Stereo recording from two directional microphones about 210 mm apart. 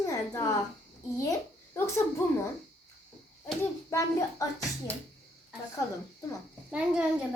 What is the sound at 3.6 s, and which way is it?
Speech, 15° left (ahead or behind).